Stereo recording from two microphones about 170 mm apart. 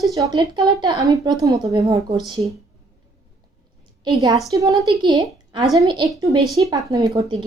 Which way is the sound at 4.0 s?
25° right (ahead or behind).